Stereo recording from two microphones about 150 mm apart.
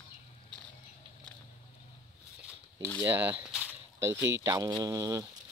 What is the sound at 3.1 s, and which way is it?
Speech, 10° right (ahead or behind).